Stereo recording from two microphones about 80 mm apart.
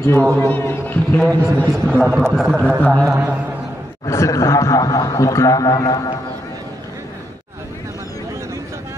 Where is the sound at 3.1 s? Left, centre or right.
Centre.